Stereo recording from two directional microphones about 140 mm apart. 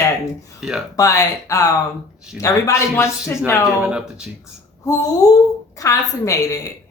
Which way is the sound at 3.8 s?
10° right (ahead or behind).